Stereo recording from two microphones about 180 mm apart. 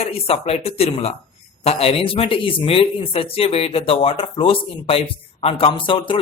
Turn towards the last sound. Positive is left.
turn(degrees=30)  # may be behind; listen again after turning